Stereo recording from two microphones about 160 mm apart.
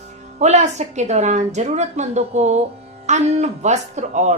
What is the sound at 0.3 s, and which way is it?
A woman's voice, 45° right (ahead or behind).